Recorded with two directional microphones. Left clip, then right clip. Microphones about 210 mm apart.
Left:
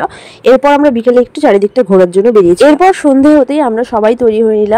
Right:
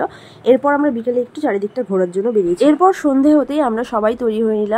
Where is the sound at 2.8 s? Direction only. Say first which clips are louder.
Left 7 dB; 20° left (ahead or behind).